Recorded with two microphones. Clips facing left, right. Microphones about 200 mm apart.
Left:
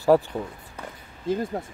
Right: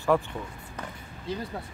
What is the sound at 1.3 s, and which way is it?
Speech, 50° left (ahead or behind).